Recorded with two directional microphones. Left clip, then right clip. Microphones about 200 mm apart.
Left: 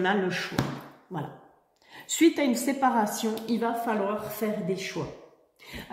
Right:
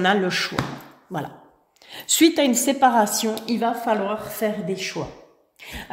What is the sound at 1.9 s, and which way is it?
A woman's voice, 55° right (ahead or behind).